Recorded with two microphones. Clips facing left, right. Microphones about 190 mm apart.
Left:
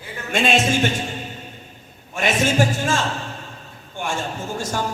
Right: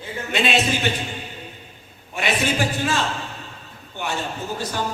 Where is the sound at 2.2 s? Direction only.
45° left (ahead or behind).